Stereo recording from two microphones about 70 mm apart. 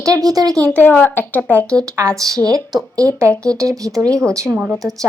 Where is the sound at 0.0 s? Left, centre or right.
Right.